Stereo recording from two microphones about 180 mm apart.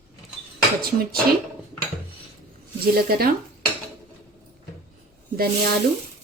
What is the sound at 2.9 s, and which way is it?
Speech, 55° right (ahead or behind).